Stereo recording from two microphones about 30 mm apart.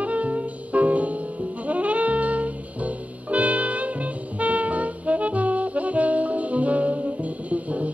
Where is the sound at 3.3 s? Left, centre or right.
Right.